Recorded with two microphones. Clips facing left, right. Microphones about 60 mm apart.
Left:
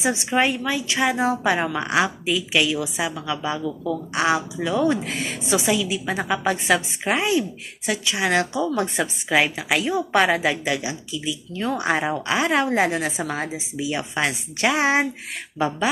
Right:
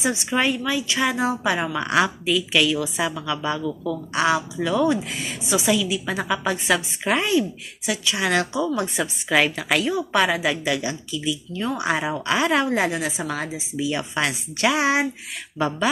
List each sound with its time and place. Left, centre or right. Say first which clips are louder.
0.0 s a woman's voice: left 1 dB; left
3.8 s a woman's voice: even; left
4.9 s a woman's voice: left 1 dB; left
9.3 s a woman's voice: right 1 dB; centre
9.8 s a woman's voice: left 3 dB; left
11.5 s a woman's voice: left 2 dB; left
15.5 s a woman's voice: even; left